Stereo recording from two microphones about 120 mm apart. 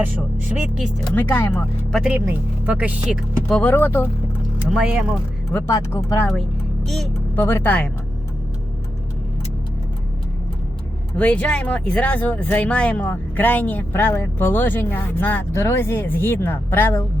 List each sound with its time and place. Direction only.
0.5 s speech: 5° right (ahead or behind)
1.1 s speech: 15° left (ahead or behind)
1.9 s speech: centre (ahead or behind)
2.1 s speech: 15° right (ahead or behind)
3.5 s speech: 10° left (ahead or behind)
4.7 s speech: 10° right (ahead or behind)
5.5 s speech: 20° left (ahead or behind)
6.8 s speech: centre (ahead or behind)
7.3 s speech: 20° left (ahead or behind)
11.2 s speech: 10° left (ahead or behind)